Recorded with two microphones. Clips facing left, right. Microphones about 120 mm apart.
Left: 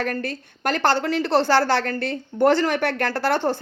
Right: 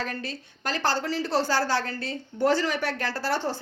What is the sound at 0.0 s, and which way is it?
A woman's voice, 55° left (ahead or behind).